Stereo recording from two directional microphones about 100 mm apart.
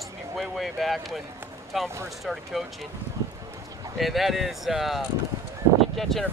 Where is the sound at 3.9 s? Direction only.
Centre (ahead or behind).